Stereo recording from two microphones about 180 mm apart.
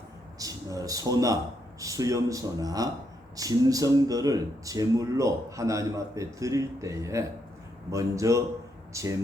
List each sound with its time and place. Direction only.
0.3 s speech: 20° right (ahead or behind)